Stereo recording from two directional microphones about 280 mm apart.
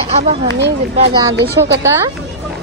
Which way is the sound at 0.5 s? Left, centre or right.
Right.